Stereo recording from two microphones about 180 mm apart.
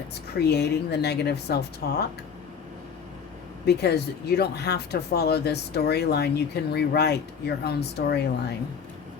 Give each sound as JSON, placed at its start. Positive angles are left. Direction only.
{"t": 0.3, "sound": "speech", "side_deg": 65}
{"t": 3.7, "sound": "speech", "side_deg": 65}